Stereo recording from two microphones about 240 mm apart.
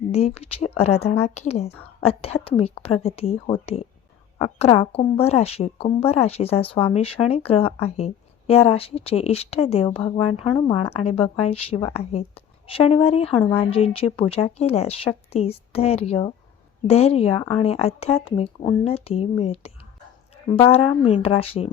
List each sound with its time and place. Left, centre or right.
0.1 s a woman's voice: left